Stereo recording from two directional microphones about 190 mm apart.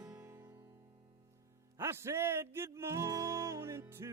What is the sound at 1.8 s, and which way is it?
Music, 15° right (ahead or behind).